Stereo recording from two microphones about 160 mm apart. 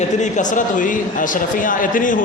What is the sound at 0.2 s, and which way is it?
A man's voice, 50° left (ahead or behind).